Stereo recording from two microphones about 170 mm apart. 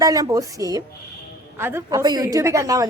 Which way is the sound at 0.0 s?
20° right (ahead or behind).